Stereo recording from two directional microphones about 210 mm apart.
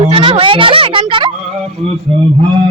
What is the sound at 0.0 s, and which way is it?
A woman's voice, 25° right (ahead or behind).